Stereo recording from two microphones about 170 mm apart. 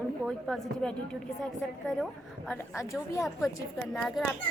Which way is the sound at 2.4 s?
15° left (ahead or behind).